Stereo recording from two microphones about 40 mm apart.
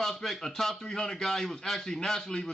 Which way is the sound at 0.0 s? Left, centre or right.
Centre.